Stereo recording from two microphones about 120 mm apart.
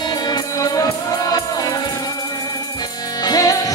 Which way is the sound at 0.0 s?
35° left (ahead or behind).